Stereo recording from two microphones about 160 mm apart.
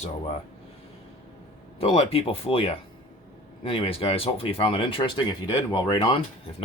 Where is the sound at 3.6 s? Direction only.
35° left (ahead or behind).